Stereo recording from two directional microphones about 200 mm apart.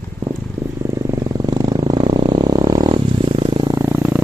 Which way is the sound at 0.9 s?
20° right (ahead or behind).